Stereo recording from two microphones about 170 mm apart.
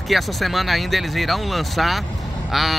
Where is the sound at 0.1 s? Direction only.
Centre (ahead or behind).